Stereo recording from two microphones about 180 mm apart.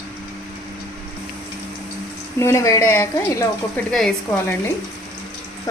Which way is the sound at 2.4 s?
15° left (ahead or behind).